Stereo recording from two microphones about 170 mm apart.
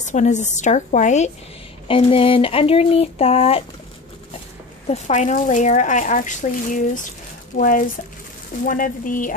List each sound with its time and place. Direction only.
0.0 s speech: 45° left (ahead or behind)
1.9 s speech: 35° left (ahead or behind)
4.8 s speech: 45° left (ahead or behind)